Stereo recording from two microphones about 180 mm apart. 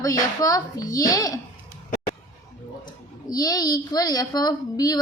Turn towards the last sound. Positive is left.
turn(degrees=20)  # may be behind; listen again after turning